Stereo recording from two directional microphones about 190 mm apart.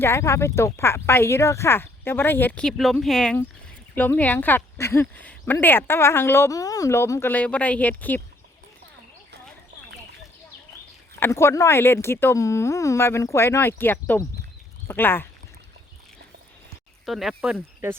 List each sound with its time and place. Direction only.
0.0 s speech: 15° left (ahead or behind)
11.2 s speech: 15° left (ahead or behind)
17.1 s speech: centre (ahead or behind)